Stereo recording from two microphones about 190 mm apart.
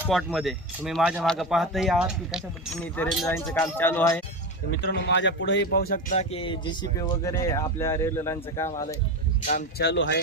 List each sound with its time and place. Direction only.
0.1 s speech: centre (ahead or behind)
4.7 s speech: 60° left (ahead or behind)
6.1 s speech: 30° left (ahead or behind)
9.4 s speech: 40° left (ahead or behind)
9.7 s speech: 65° left (ahead or behind)